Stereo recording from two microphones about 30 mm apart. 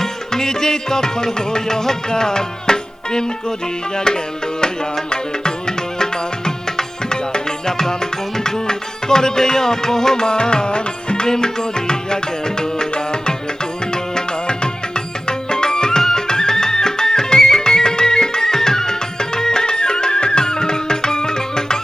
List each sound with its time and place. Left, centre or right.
0.0 s music: centre